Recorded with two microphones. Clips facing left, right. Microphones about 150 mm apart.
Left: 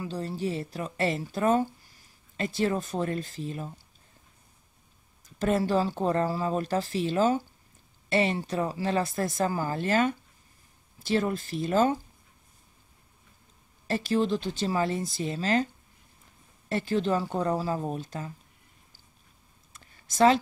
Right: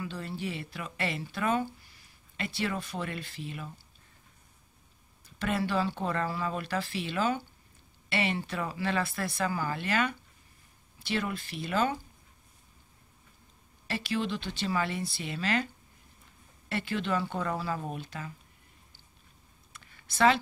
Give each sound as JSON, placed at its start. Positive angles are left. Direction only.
{"t": 0.0, "sound": "speech", "side_deg": 35}
{"t": 5.4, "sound": "speech", "side_deg": 40}
{"t": 13.8, "sound": "speech", "side_deg": 40}
{"t": 19.7, "sound": "a sound", "side_deg": 40}